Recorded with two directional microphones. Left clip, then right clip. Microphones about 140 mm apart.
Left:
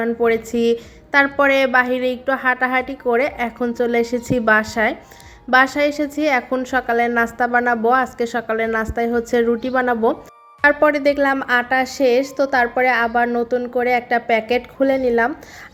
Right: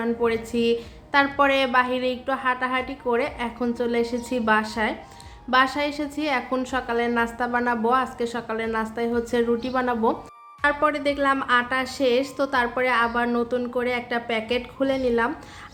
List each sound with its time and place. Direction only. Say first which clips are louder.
0.0 s a woman's voice: left 6 dB; 30° left (ahead or behind)